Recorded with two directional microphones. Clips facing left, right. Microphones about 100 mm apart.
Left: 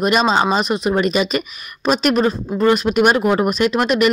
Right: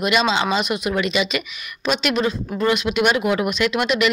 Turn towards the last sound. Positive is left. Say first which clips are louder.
# left 4 dB
turn(degrees=45)  # may be behind; listen again after turning